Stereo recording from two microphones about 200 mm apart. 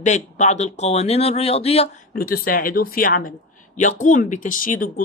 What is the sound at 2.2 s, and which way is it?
Speech, 45° left (ahead or behind).